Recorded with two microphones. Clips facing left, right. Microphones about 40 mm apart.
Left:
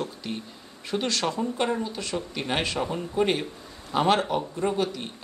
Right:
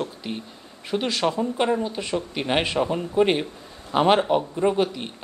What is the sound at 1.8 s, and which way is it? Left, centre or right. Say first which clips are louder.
Speech: right 4 dB; right.